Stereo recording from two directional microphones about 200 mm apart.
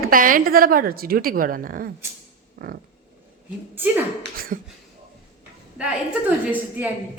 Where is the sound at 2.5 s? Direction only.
45° right (ahead or behind).